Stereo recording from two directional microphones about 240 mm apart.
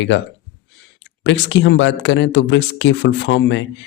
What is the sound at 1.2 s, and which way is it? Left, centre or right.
Speech, left.